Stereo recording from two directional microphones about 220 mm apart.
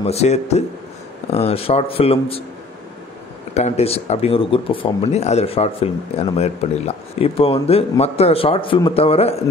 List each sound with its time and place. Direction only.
0.0 s speech: 30° left (ahead or behind)
3.5 s speech: 30° left (ahead or behind)